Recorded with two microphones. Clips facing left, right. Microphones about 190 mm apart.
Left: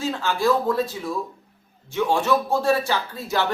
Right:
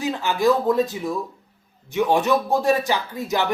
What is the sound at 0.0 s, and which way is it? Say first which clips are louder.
Speech: right 2 dB; 15° right (ahead or behind).